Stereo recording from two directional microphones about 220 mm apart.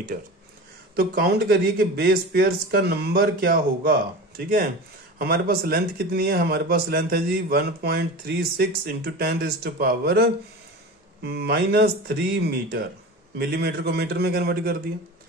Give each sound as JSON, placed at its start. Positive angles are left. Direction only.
{"t": 0.1, "sound": "a man's voice", "side_deg": -40}